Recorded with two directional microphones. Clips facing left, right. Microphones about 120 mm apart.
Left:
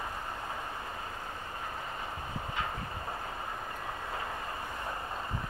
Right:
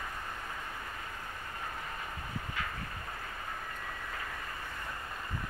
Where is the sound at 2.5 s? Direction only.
25° left (ahead or behind).